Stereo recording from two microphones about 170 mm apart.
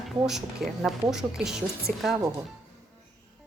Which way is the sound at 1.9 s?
60° right (ahead or behind).